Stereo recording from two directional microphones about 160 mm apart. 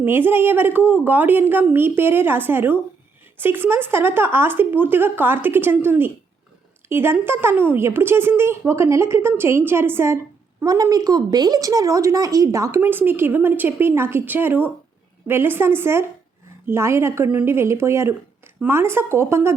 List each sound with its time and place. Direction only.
0.0 s a woman's voice: 15° right (ahead or behind)